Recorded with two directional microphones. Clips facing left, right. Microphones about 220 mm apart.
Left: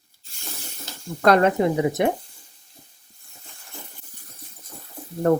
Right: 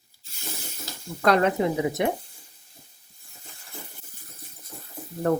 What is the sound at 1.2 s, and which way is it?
Speech, 50° left (ahead or behind).